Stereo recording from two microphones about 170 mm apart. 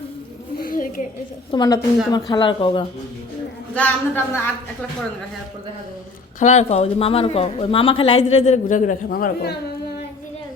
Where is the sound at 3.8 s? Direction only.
10° left (ahead or behind).